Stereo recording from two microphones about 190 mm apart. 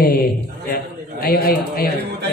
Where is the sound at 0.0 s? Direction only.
50° left (ahead or behind).